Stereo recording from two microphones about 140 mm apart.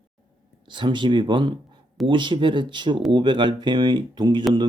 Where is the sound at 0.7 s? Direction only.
35° right (ahead or behind).